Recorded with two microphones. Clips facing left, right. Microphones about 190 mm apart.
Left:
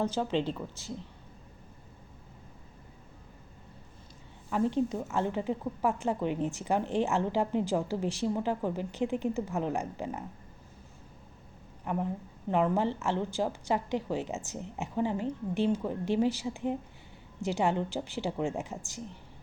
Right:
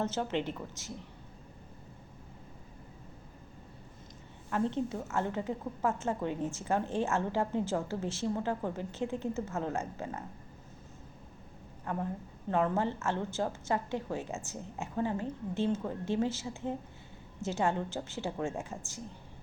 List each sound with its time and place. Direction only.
0.0 s a woman's voice: 15° left (ahead or behind)
4.4 s a woman's voice: 15° left (ahead or behind)
11.9 s a woman's voice: 20° left (ahead or behind)